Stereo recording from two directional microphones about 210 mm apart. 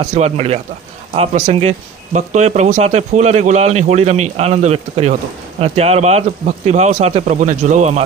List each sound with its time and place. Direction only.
0.1 s speech: 30° right (ahead or behind)